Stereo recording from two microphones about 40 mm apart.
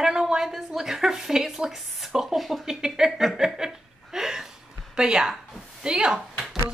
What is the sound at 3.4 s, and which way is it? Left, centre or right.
Chuckle, centre.